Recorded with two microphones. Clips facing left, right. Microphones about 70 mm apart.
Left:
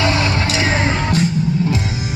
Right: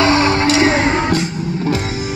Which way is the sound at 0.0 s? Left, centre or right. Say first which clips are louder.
Right 5 dB; right.